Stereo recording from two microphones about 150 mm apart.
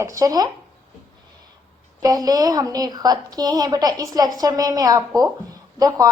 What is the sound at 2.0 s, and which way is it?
A woman's voice, 25° right (ahead or behind).